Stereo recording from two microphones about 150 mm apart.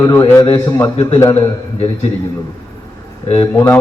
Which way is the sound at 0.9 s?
40° left (ahead or behind).